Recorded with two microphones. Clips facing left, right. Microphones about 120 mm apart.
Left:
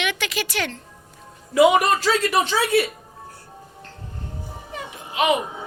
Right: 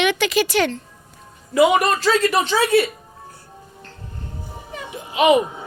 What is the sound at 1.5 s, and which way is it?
Speech, 5° left (ahead or behind).